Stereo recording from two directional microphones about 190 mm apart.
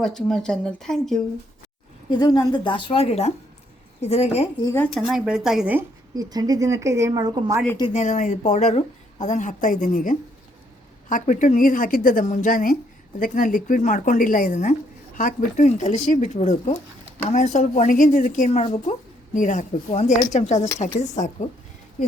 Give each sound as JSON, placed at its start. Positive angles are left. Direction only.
{"t": 0.0, "sound": "speech", "side_deg": 0}
{"t": 2.0, "sound": "a woman's voice", "side_deg": 20}
{"t": 4.6, "sound": "speech", "side_deg": 10}
{"t": 4.9, "sound": "speech", "side_deg": 0}
{"t": 6.1, "sound": "speech", "side_deg": -20}
{"t": 7.9, "sound": "a woman's voice", "side_deg": 40}